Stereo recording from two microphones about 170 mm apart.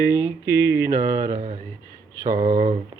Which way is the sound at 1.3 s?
40° right (ahead or behind).